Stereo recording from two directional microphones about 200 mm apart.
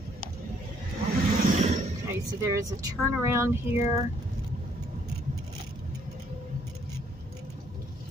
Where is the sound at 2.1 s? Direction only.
15° right (ahead or behind).